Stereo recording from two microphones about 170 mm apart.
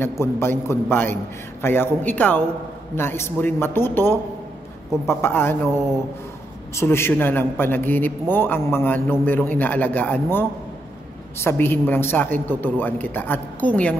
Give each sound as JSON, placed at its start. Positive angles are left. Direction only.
{"t": 0.0, "sound": "a man's voice", "side_deg": 15}
{"t": 6.7, "sound": "a man's voice", "side_deg": 15}